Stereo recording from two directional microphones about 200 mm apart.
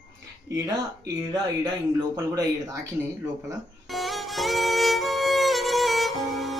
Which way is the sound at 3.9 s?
Centre (ahead or behind).